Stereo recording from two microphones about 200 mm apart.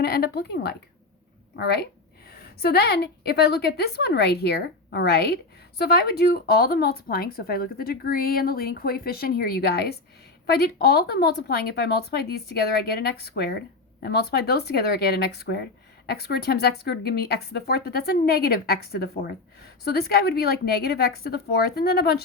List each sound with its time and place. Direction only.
0.0 s speech: 55° left (ahead or behind)